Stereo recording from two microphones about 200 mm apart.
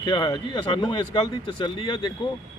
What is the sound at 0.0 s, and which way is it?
Speech, 25° left (ahead or behind).